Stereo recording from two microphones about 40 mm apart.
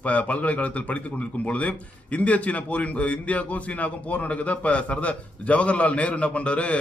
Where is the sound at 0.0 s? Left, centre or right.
Left.